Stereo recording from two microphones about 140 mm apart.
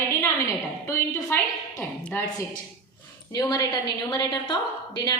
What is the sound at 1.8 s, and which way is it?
Speech, 15° left (ahead or behind).